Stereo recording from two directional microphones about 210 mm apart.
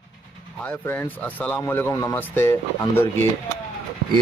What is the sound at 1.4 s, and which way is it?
Speech, 10° left (ahead or behind).